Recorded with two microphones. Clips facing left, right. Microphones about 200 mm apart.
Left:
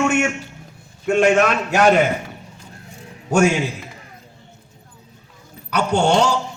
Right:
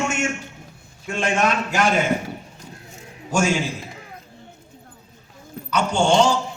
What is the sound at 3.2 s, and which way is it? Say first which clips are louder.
Speech: left 5 dB; 60° left (ahead or behind).